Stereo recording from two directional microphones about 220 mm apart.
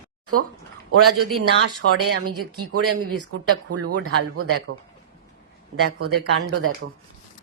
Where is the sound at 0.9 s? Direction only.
90° right.